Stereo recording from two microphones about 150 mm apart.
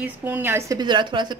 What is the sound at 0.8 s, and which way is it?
Speech, 30° right (ahead or behind).